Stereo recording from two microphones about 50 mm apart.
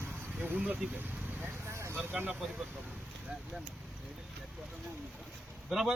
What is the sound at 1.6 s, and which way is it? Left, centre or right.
Vehicle, right.